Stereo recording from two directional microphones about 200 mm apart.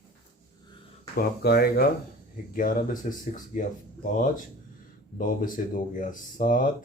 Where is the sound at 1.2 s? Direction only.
50° left (ahead or behind).